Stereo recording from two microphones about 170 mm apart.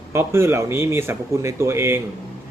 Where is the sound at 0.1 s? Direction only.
15° right (ahead or behind).